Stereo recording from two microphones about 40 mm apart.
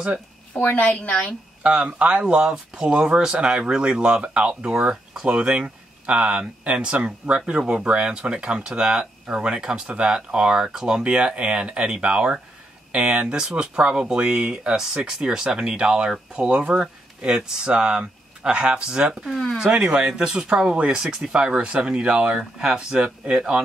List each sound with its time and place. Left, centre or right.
0.6 s a woman's voice: left
1.6 s speech: right
2.5 s speech: centre
9.8 s speech: right
10.1 s speech: right
13.3 s speech: centre
21.0 s speech: centre